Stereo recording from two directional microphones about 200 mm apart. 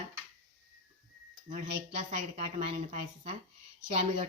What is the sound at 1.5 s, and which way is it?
Speech, 35° right (ahead or behind).